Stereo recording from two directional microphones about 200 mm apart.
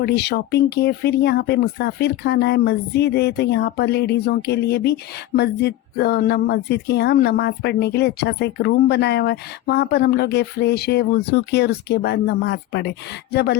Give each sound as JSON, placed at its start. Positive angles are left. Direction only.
{"t": 0.0, "sound": "speech", "side_deg": 55}